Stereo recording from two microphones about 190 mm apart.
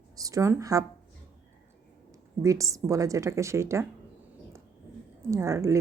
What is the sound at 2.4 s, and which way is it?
A woman's voice, 15° right (ahead or behind).